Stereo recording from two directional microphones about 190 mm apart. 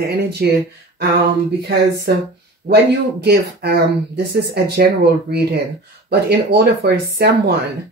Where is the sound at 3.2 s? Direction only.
60° right (ahead or behind).